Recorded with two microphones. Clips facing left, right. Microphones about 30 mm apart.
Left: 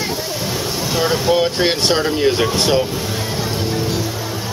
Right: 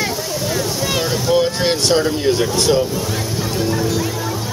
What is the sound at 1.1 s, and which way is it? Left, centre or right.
Speech, centre.